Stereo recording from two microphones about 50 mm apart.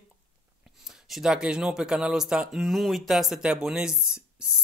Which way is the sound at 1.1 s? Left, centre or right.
Centre.